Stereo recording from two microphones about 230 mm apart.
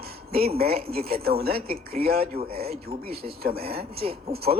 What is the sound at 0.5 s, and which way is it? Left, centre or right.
Speech, right.